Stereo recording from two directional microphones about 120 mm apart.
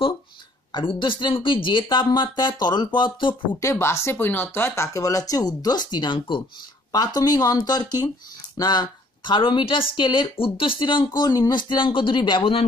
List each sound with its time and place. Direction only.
0.7 s a woman's voice: 45° left (ahead or behind)
3.5 s a woman's voice: 25° left (ahead or behind); by 12.6 s 45° left (ahead or behind)